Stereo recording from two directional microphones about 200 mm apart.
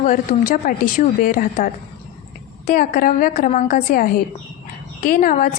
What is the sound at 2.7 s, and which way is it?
A woman's voice, 40° left (ahead or behind).